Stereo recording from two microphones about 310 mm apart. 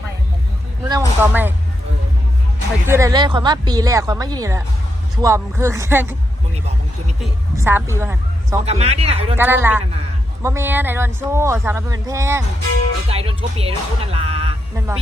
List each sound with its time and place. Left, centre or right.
0.9 s speech: centre
2.8 s speech: centre
7.5 s a woman's voice: centre
8.6 s speech: centre
9.3 s speech: centre